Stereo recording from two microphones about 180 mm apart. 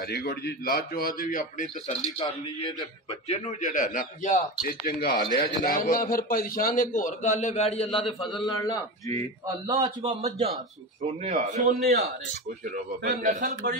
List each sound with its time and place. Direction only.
0.0 s a man's voice: 60° left (ahead or behind)
2.2 s a man's voice: 20° left (ahead or behind)
3.3 s a man's voice: 45° left (ahead or behind); by 9.1 s 20° left (ahead or behind)
9.7 s a man's voice: 20° right (ahead or behind)
11.1 s a man's voice: 40° right (ahead or behind)
11.8 s a man's voice: 60° right (ahead or behind)
12.6 s a man's voice: 45° right (ahead or behind)